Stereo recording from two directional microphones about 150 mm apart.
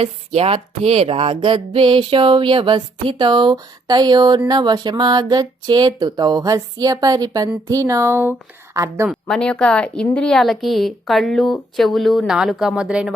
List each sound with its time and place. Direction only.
0.0 s a woman's voice: 40° right (ahead or behind); by 9.0 s 20° right (ahead or behind)
9.0 s a woman's voice: 5° left (ahead or behind)